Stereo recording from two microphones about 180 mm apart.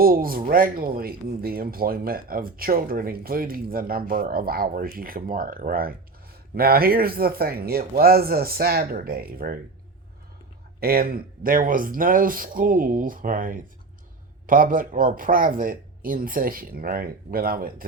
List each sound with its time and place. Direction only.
0.0 s speech: 55° right (ahead or behind)
10.8 s speech: 55° right (ahead or behind)